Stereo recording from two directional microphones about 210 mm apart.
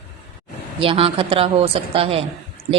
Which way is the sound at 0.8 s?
25° right (ahead or behind).